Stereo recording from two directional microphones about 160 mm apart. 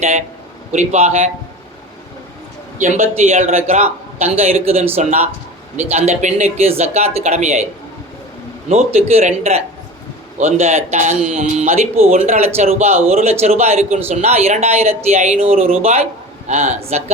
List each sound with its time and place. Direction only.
0.0 s a man's voice: 45° right (ahead or behind)
2.7 s a man's voice: 50° right (ahead or behind)
8.7 s a man's voice: 45° right (ahead or behind)